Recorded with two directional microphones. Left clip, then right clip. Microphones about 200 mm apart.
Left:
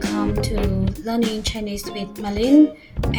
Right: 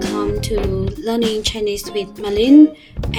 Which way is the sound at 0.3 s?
Centre (ahead or behind).